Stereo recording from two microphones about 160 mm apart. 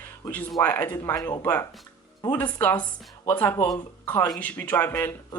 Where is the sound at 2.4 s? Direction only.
10° left (ahead or behind).